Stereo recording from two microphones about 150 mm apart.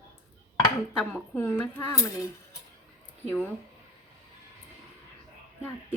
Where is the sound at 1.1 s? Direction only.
10° left (ahead or behind).